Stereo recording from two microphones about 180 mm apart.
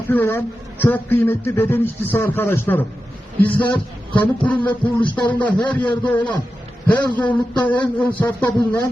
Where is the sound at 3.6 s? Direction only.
25° left (ahead or behind).